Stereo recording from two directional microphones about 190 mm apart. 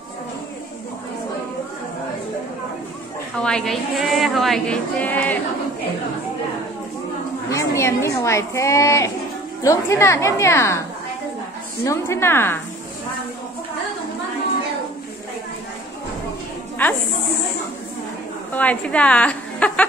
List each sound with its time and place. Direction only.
3.3 s a woman's voice: 5° left (ahead or behind)
7.4 s a woman's voice: 15° left (ahead or behind)
11.8 s a woman's voice: 15° left (ahead or behind)
18.5 s a woman's voice: 10° left (ahead or behind)